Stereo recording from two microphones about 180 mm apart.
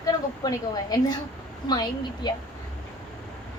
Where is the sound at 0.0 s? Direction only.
20° left (ahead or behind).